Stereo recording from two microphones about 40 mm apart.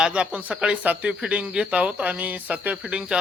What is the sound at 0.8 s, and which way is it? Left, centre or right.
Speech, right.